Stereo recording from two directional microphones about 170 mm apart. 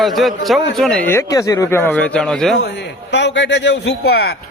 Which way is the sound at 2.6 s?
90° left.